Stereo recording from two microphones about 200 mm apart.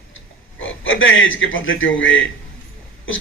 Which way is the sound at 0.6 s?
75° left (ahead or behind).